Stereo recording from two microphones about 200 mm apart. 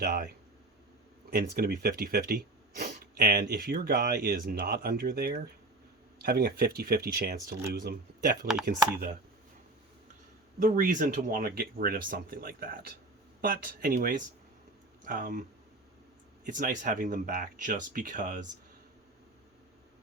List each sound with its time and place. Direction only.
0.0 s speech: 45° right (ahead or behind)
1.3 s speech: 45° right (ahead or behind)
10.6 s speech: 40° right (ahead or behind)
16.5 s speech: 45° right (ahead or behind)